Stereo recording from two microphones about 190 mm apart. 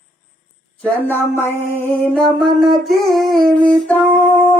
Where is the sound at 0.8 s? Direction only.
10° left (ahead or behind).